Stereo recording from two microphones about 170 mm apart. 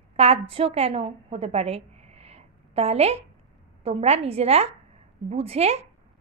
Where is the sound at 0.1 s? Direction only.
35° right (ahead or behind).